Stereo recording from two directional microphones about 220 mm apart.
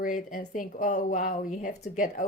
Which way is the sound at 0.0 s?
35° left (ahead or behind).